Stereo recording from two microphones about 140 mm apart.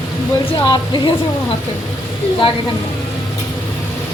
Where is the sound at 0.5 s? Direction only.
30° left (ahead or behind).